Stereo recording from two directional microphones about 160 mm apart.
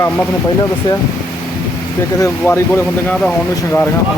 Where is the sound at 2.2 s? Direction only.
15° left (ahead or behind).